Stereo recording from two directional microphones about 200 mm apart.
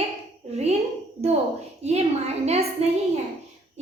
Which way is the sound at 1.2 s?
35° right (ahead or behind).